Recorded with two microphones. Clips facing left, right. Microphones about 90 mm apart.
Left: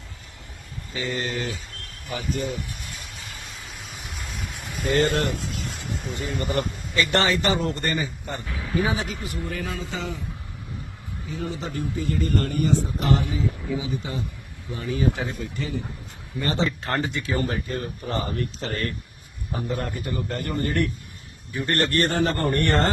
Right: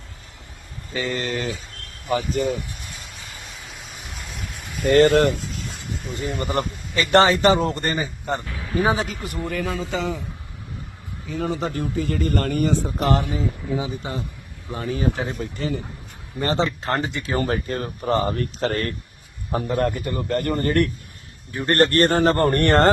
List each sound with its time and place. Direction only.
0.9 s a man's voice: 80° right
4.9 s speech: 75° right (ahead or behind)
6.2 s a man's voice: 30° right (ahead or behind)
8.4 s speech: centre (ahead or behind)
8.8 s a man's voice: 40° right (ahead or behind)
9.5 s a man's voice: 90° right
11.3 s a man's voice: 70° right (ahead or behind); by 16.7 s 35° right (ahead or behind)
16.8 s speech: 20° right (ahead or behind)
17.3 s a man's voice: 55° right (ahead or behind)
19.5 s a man's voice: 55° right (ahead or behind)
21.6 s a man's voice: 45° right (ahead or behind)